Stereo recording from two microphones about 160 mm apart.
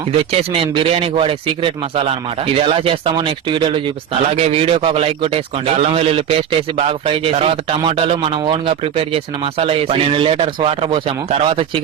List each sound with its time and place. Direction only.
0.5 s a man's voice: 35° right (ahead or behind)